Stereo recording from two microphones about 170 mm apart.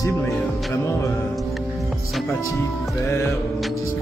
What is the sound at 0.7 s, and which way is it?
Speech, 15° left (ahead or behind).